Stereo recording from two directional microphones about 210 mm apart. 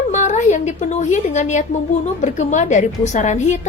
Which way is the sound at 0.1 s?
35° left (ahead or behind).